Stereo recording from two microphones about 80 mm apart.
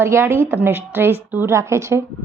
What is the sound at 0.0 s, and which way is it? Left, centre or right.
A woman's voice, right.